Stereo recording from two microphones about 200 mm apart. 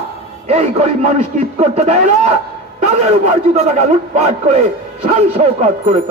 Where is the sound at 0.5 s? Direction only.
35° right (ahead or behind).